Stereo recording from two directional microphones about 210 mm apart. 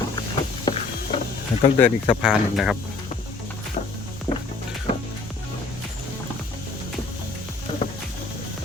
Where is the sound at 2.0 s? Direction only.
Centre (ahead or behind).